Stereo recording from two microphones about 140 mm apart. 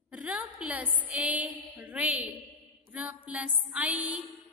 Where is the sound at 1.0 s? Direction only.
10° right (ahead or behind).